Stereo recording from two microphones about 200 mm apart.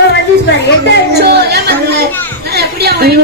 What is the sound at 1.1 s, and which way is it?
A woman's voice, 55° right (ahead or behind).